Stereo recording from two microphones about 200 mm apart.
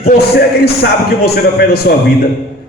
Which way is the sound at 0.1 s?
50° left (ahead or behind).